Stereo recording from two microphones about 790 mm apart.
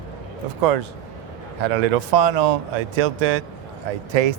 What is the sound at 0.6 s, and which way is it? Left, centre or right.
Speech, right.